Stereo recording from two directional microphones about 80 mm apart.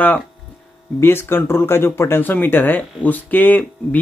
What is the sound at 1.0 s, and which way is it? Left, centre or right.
Speech, left.